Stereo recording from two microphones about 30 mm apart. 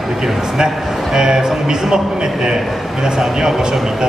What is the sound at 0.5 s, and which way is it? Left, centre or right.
A man's voice, right.